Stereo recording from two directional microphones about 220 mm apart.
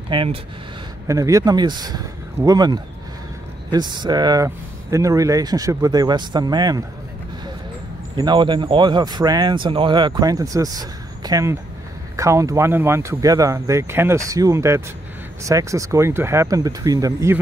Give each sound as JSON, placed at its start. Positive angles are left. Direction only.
{"t": 0.1, "sound": "speech", "side_deg": -25}
{"t": 8.2, "sound": "speech", "side_deg": -20}